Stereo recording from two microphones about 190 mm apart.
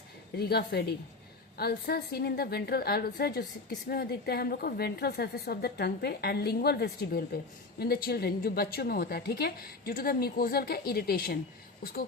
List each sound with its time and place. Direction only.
0.3 s a woman's voice: 60° left (ahead or behind)